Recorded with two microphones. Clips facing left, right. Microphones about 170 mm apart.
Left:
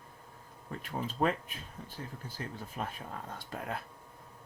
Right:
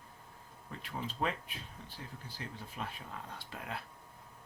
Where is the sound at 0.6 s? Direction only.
45° left (ahead or behind).